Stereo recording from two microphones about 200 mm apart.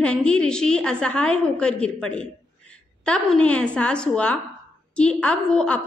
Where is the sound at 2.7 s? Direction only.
5° left (ahead or behind).